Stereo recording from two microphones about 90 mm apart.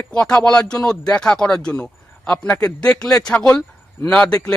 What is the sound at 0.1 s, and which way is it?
A man's voice, 10° left (ahead or behind).